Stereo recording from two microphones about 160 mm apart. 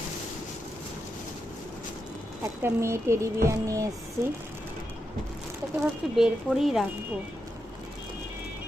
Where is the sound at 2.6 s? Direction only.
15° right (ahead or behind).